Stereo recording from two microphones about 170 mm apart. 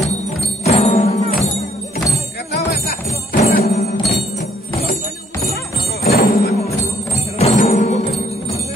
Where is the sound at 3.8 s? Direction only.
70° left (ahead or behind).